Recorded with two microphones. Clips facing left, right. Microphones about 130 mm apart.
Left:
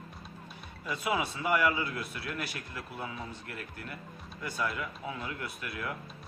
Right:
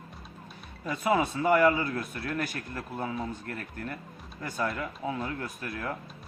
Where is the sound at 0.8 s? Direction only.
45° right (ahead or behind).